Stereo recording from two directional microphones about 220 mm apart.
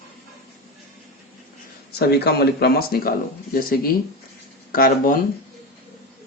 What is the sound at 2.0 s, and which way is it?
Speech, 45° left (ahead or behind).